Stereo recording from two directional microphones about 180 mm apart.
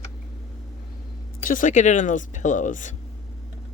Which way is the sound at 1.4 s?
45° left (ahead or behind).